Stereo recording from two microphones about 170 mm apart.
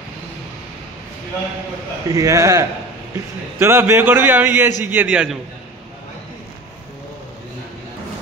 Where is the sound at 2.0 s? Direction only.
20° right (ahead or behind).